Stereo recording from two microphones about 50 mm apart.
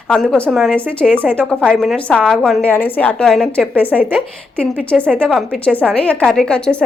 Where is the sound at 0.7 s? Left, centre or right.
Left.